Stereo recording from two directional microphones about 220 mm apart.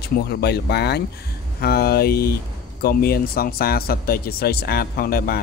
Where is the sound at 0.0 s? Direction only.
45° left (ahead or behind).